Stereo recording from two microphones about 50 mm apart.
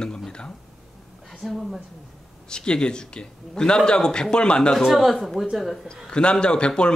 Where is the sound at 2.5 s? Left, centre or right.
Centre.